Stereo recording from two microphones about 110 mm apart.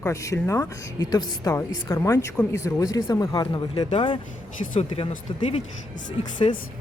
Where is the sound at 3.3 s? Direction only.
45° left (ahead or behind).